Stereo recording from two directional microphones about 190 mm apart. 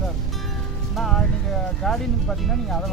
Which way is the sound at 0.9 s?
Centre (ahead or behind).